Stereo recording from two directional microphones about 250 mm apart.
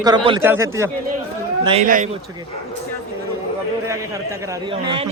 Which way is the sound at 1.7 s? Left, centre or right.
Right.